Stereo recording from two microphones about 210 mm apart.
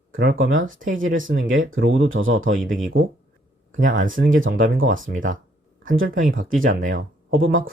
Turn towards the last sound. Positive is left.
turn(degrees=-70)  # may be behind; listen again after turning